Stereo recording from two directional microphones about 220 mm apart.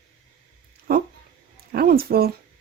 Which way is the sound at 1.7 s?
45° right (ahead or behind).